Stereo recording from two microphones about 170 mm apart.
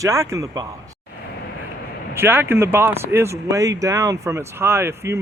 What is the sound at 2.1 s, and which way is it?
Speech, 15° right (ahead or behind).